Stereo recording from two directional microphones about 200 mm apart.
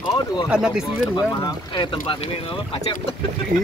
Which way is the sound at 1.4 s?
20° left (ahead or behind).